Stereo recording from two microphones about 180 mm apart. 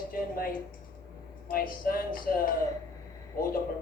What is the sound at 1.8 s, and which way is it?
Speech, 55° left (ahead or behind).